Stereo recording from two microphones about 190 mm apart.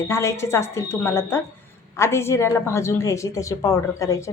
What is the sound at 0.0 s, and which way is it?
A woman's voice, 15° left (ahead or behind).